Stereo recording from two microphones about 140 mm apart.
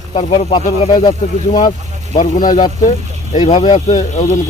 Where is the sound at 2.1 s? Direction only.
60° left (ahead or behind).